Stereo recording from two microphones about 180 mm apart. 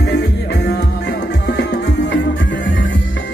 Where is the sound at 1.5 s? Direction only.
75° left (ahead or behind).